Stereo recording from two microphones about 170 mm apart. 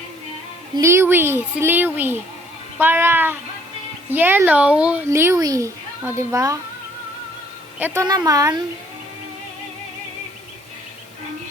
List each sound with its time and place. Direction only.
0.8 s a woman's voice: 15° right (ahead or behind)
7.8 s a woman's voice: 10° right (ahead or behind)
8.0 s speech: 20° right (ahead or behind)